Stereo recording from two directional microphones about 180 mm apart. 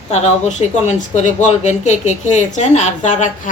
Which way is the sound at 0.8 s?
40° left (ahead or behind).